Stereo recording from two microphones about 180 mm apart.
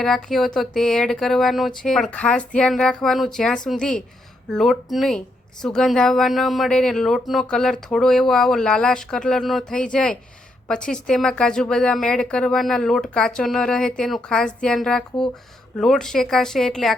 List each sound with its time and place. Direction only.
0.0 s a woman's voice: centre (ahead or behind)